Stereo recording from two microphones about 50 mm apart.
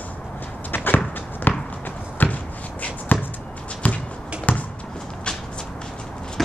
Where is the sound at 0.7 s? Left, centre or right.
Left.